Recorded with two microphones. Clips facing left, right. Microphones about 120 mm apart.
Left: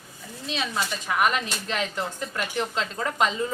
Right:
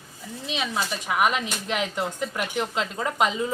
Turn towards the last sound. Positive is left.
turn(degrees=-10)  # may be behind; listen again after turning